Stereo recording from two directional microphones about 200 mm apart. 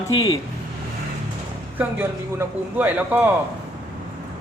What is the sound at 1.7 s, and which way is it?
A man's voice, 10° right (ahead or behind).